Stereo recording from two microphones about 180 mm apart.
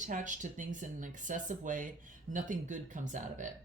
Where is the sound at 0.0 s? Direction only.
45° right (ahead or behind).